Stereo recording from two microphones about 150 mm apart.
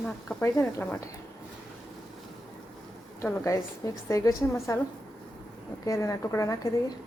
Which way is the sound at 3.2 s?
10° left (ahead or behind).